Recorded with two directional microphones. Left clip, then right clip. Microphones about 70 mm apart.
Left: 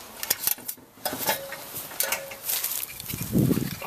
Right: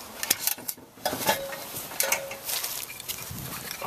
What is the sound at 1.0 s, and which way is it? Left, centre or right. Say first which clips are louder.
Stir: right 2 dB; centre.